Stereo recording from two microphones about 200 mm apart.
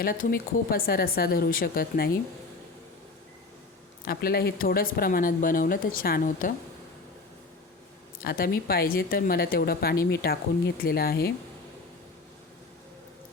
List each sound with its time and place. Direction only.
0.0 s speech: 45° left (ahead or behind)
4.0 s speech: 50° left (ahead or behind)
8.2 s speech: 50° left (ahead or behind)